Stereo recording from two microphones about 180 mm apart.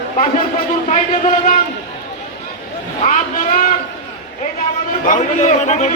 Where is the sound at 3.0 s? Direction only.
45° left (ahead or behind).